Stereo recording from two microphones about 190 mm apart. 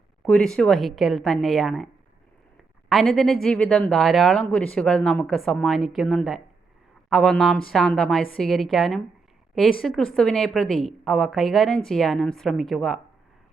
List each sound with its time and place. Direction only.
0.3 s speech: 5° left (ahead or behind)
2.9 s speech: centre (ahead or behind)